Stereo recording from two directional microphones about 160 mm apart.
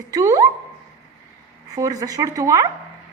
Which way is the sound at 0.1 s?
20° right (ahead or behind).